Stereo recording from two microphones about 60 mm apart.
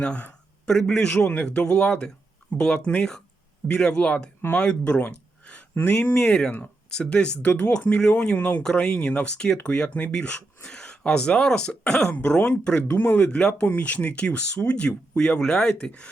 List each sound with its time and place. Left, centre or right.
0.0 s speech: left
0.6 s speech: centre
6.1 s speech: centre